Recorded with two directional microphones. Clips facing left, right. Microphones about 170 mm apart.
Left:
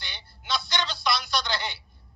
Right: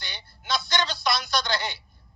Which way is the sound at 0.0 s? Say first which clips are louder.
Right 2 dB; 45° right (ahead or behind).